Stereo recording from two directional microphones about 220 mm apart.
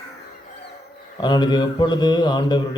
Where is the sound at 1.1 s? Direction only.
20° left (ahead or behind).